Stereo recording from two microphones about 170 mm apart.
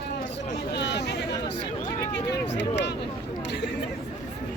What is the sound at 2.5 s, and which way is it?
Speech, 90° left.